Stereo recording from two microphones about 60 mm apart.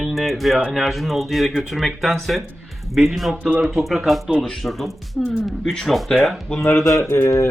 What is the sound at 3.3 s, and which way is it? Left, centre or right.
Speech, right.